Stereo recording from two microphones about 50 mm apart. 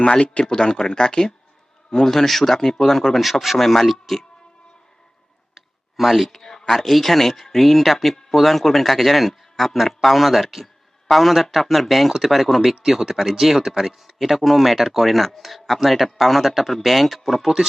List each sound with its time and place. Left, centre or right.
0.0 s speech: centre
5.5 s speech: centre